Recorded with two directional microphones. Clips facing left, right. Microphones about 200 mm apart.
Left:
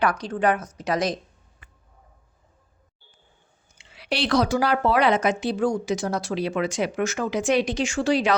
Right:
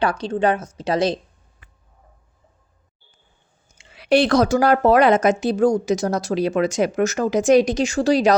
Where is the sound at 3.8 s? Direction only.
50° right (ahead or behind).